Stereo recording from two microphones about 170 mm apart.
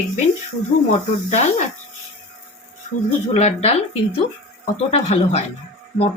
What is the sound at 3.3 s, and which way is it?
Speech, 40° left (ahead or behind).